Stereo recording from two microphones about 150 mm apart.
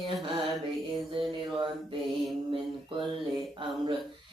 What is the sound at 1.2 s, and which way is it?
Mantra, 35° right (ahead or behind).